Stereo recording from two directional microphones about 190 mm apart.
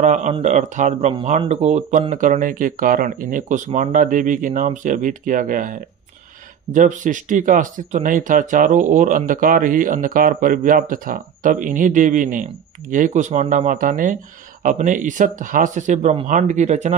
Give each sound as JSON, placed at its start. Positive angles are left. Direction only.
{"t": 0.0, "sound": "speech", "side_deg": -40}